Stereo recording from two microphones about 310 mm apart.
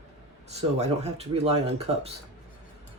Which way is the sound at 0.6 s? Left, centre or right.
Centre.